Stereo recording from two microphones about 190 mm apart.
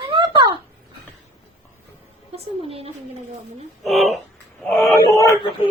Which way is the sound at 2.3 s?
30° right (ahead or behind).